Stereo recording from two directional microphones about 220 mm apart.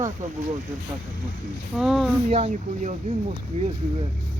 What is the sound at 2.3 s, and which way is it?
Speech, 30° right (ahead or behind).